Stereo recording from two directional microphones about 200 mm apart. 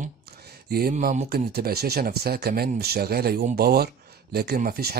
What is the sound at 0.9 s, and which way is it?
Speech, 40° right (ahead or behind).